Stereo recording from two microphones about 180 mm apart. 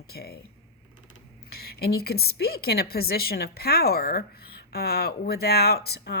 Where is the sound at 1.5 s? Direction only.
60° left (ahead or behind).